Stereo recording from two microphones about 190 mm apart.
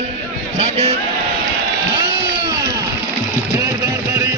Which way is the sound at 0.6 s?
35° right (ahead or behind).